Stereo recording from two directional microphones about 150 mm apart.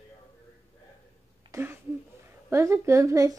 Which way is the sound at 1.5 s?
15° right (ahead or behind).